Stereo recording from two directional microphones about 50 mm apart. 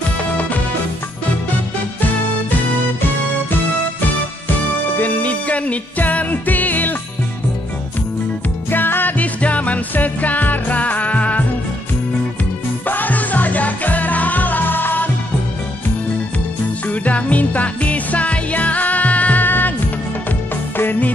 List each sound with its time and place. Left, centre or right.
0.2 s music: left
4.9 s music: left
8.6 s music: left
12.8 s music: left
16.8 s music: left
20.7 s music: left